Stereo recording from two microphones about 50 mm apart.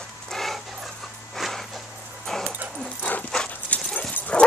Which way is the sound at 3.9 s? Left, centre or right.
Left.